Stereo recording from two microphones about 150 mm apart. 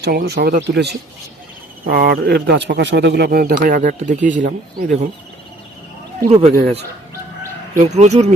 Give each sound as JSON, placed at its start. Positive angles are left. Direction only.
{"t": 0.0, "sound": "speech", "side_deg": -90}
{"t": 6.2, "sound": "speech", "side_deg": -45}
{"t": 7.8, "sound": "speech", "side_deg": -50}